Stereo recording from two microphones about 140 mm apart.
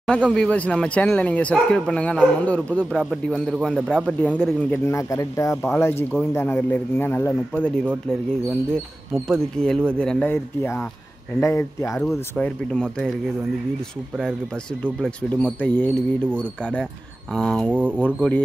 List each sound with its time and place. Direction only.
0.0 s speech: 5° left (ahead or behind)
9.6 s speech: 5° left (ahead or behind)
10.3 s speech: 15° left (ahead or behind)
12.0 s speech: 10° left (ahead or behind)
14.8 s speech: 10° left (ahead or behind)
17.6 s speech: 10° right (ahead or behind)
18.0 s speech: 10° left (ahead or behind)